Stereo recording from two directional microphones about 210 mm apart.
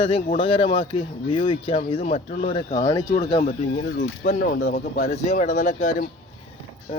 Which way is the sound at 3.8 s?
55° left (ahead or behind).